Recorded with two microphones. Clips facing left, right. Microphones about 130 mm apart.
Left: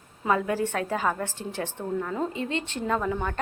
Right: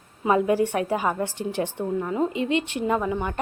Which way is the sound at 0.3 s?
15° right (ahead or behind).